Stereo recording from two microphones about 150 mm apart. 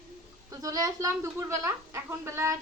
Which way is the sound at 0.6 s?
25° right (ahead or behind).